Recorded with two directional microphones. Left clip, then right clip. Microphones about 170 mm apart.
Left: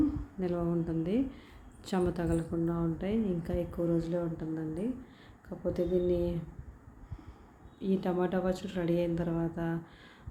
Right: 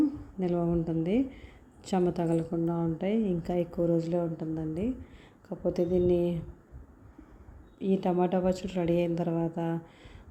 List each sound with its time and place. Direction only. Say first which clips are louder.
0.3 s a woman's voice: right 5 dB; 20° right (ahead or behind)
7.8 s a woman's voice: right 4 dB; 25° right (ahead or behind)